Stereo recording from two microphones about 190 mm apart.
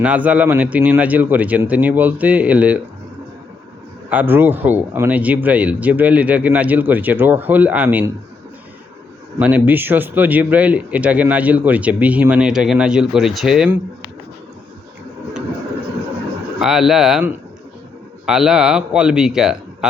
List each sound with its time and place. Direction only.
0.0 s speech: 5° right (ahead or behind)
4.1 s speech: 10° right (ahead or behind)
9.4 s speech: 10° right (ahead or behind)
16.6 s speech: centre (ahead or behind)